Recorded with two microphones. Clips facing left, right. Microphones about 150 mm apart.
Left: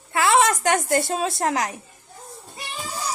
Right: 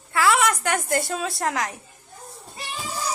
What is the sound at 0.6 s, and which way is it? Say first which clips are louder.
A woman's voice: left 3 dB; 25° left (ahead or behind).